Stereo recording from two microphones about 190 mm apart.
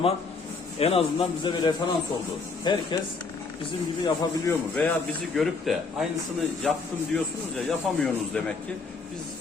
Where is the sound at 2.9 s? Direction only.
25° left (ahead or behind).